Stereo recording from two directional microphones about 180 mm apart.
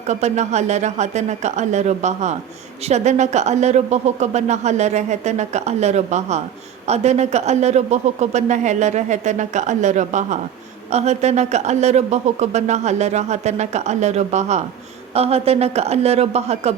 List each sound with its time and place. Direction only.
0.1 s speech: 40° right (ahead or behind)